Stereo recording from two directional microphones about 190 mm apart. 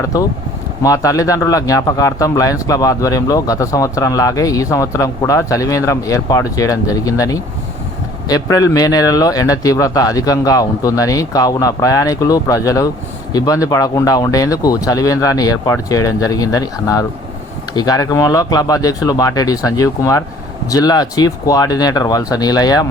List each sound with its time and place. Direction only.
0.1 s a man's voice: 20° left (ahead or behind)